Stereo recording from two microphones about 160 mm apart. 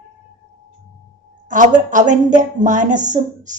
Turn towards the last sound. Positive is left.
turn(degrees=-50)  # may be behind; listen again after turning